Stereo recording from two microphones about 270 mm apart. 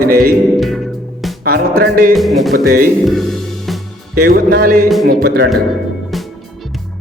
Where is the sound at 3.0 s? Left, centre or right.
Centre.